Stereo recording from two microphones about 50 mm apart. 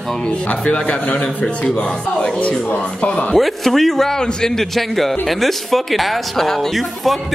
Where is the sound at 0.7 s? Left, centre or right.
Left.